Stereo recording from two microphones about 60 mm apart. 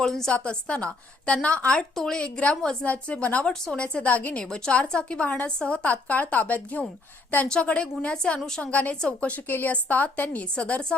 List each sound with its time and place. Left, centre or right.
0.0 s a woman's voice: centre
3.5 s a woman's voice: centre; by 4.4 s left
4.4 s a woman's voice: centre; by 6.8 s left
7.4 s a woman's voice: centre
8.6 s a woman's voice: left
9.0 s a woman's voice: centre
9.3 s a woman's voice: left